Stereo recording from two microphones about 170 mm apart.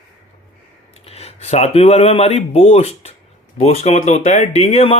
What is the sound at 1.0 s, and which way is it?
Speech, 35° left (ahead or behind).